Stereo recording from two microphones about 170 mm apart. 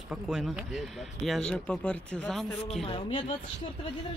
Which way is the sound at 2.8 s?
30° left (ahead or behind).